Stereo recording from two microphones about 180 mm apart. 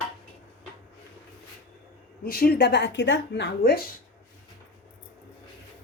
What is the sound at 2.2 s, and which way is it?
Speech, 55° left (ahead or behind).